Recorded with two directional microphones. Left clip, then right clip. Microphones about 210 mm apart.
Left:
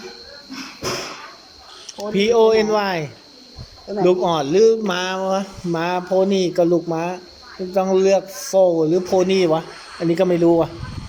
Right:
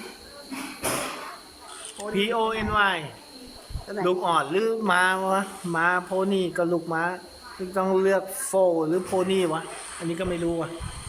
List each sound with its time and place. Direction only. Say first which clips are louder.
2.0 s speech: left 9 dB; 15° left (ahead or behind)